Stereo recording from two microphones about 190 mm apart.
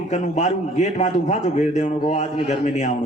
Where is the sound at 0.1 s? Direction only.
35° left (ahead or behind).